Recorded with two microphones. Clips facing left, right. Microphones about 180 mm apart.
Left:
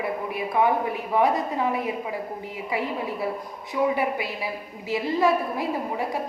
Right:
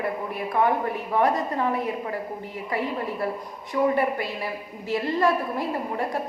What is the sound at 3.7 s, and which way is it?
A woman's voice, 10° left (ahead or behind).